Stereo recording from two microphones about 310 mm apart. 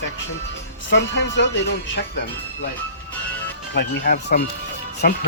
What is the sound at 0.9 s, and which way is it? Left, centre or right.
Speech, left.